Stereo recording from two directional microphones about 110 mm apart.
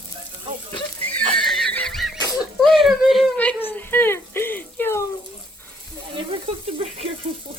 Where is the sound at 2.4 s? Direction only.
Centre (ahead or behind).